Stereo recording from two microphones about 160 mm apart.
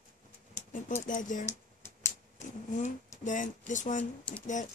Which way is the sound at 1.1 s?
55° left (ahead or behind).